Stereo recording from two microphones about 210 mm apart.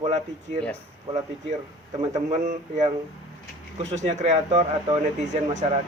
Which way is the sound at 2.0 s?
35° right (ahead or behind).